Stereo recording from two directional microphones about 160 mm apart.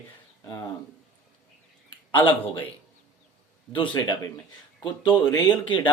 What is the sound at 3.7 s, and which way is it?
A man's voice, 25° left (ahead or behind).